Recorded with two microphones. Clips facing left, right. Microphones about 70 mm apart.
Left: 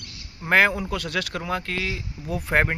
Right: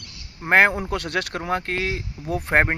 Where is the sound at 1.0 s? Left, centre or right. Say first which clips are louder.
Right 2 dB; right.